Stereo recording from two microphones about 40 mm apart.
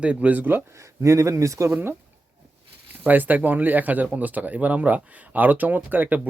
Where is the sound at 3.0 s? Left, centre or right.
Right.